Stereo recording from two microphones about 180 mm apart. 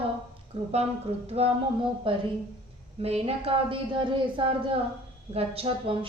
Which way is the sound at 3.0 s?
35° right (ahead or behind).